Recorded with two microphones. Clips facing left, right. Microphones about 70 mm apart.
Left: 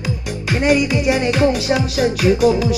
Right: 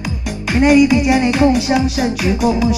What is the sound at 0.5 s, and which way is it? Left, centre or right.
Music, centre.